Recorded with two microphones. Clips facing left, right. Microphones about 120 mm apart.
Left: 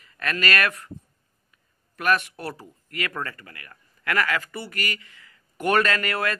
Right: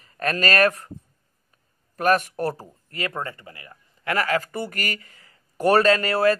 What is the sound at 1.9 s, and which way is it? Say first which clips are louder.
Speech: right 3 dB; 40° right (ahead or behind).